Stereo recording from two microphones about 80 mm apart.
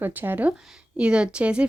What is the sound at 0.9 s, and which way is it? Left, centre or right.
Speech, centre.